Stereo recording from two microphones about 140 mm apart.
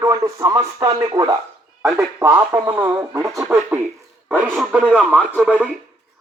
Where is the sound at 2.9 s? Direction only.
25° right (ahead or behind); by 5.5 s 5° right (ahead or behind).